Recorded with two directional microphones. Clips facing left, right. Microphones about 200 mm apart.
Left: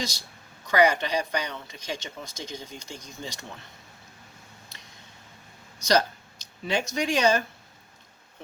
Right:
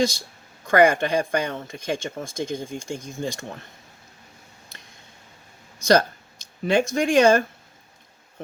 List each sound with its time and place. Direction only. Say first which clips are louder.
0.6 s speech: right 5 dB; 50° right (ahead or behind)
4.7 s a sound: right 2 dB; 50° right (ahead or behind)
5.8 s speech: right 5 dB; 50° right (ahead or behind)